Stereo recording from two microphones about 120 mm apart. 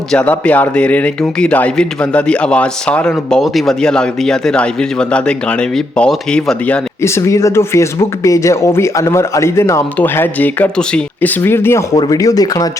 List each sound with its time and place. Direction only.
0.1 s speech: 10° left (ahead or behind)
7.0 s speech: 25° left (ahead or behind)
11.9 s speech: 30° left (ahead or behind)